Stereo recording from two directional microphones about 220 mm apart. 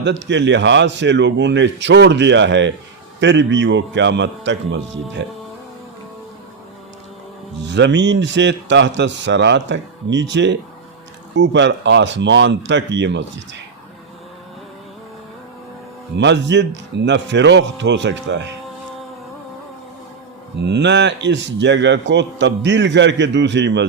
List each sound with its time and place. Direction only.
0.0 s a man's voice: 55° right (ahead or behind)
7.7 s a man's voice: 55° right (ahead or behind)
16.1 s a man's voice: 50° right (ahead or behind)
20.6 s a man's voice: 50° right (ahead or behind)